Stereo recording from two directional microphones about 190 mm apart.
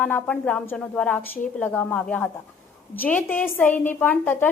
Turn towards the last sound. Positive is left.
turn(degrees=10)  # may be behind; listen again after turning